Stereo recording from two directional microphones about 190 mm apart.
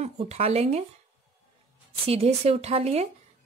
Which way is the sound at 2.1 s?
30° right (ahead or behind).